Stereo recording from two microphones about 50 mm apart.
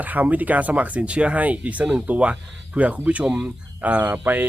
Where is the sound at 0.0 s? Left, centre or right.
Right.